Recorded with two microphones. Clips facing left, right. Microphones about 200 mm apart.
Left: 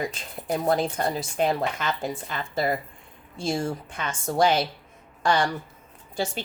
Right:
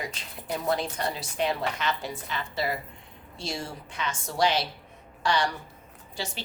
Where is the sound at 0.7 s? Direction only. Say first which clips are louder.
Left 4 dB; 45° left (ahead or behind).